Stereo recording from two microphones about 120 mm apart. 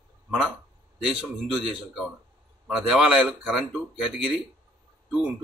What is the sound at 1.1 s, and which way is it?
Speech, 10° right (ahead or behind).